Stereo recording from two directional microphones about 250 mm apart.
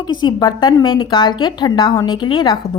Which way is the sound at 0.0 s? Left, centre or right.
Centre.